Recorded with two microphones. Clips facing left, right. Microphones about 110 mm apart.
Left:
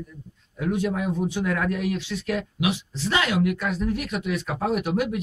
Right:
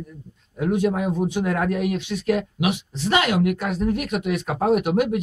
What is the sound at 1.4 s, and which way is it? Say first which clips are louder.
Speech: right 2 dB; 40° right (ahead or behind).